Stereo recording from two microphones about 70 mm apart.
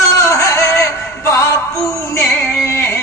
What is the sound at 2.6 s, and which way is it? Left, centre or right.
Music, left.